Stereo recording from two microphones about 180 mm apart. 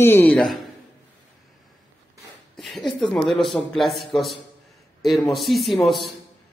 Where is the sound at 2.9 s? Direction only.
Centre (ahead or behind).